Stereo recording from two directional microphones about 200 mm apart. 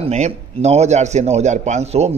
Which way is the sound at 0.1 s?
35° right (ahead or behind).